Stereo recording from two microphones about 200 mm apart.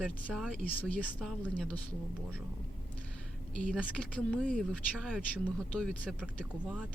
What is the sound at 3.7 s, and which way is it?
Speech, 5° left (ahead or behind).